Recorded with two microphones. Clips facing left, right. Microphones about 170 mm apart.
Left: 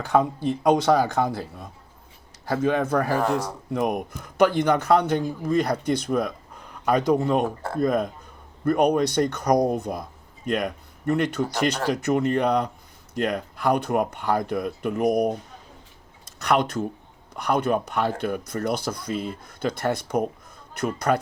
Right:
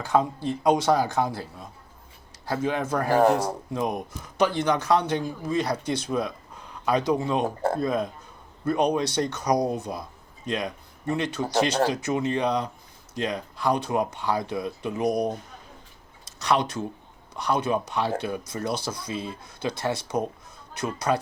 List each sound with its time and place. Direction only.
0.0 s a man's voice: 60° left (ahead or behind)
7.4 s speech: 40° right (ahead or behind)
7.8 s a man's voice: 55° left (ahead or behind)
16.4 s a man's voice: 55° left (ahead or behind)